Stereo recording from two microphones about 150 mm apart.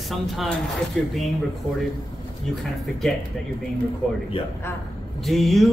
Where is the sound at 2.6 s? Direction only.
Centre (ahead or behind).